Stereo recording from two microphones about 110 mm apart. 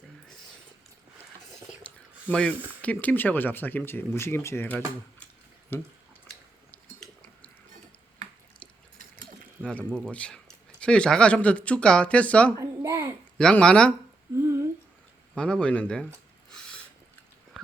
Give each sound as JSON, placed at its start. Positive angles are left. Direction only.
{"t": 2.3, "sound": "speech", "side_deg": 10}
{"t": 9.6, "sound": "speech", "side_deg": 10}
{"t": 12.5, "sound": "a child's voice", "side_deg": -25}
{"t": 13.4, "sound": "speech", "side_deg": 10}
{"t": 14.3, "sound": "humming", "side_deg": -20}
{"t": 15.4, "sound": "speech", "side_deg": 10}